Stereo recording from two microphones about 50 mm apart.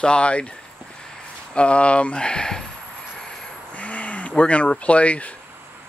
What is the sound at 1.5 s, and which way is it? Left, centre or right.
Speech, left.